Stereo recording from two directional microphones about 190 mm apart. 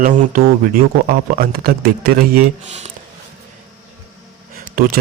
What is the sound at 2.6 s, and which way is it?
Speech, 35° right (ahead or behind).